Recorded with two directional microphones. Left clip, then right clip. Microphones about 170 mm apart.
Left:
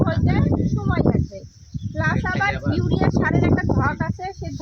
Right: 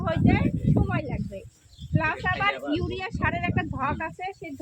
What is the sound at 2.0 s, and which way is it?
Speech, 10° left (ahead or behind).